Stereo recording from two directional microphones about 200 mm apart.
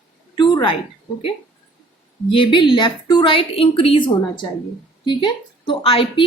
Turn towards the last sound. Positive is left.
turn(degrees=30)  # may be behind; listen again after turning